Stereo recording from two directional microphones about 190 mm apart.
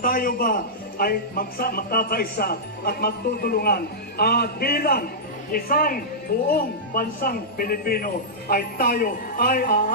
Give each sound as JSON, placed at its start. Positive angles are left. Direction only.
{"t": 0.0, "sound": "a man's voice", "side_deg": 50}